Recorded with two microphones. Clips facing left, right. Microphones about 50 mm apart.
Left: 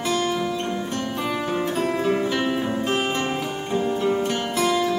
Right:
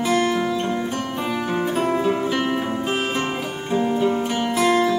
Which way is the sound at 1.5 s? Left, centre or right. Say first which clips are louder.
Right 4 dB; centre.